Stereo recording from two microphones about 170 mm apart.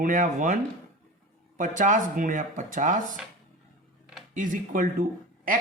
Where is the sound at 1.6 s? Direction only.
50° right (ahead or behind).